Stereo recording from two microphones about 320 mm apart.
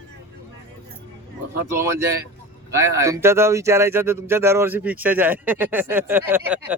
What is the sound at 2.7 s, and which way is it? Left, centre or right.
Speech, centre.